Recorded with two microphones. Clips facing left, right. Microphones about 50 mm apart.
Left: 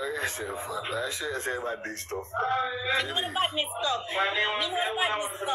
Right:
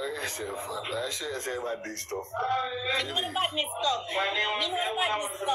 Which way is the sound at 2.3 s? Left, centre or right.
Left.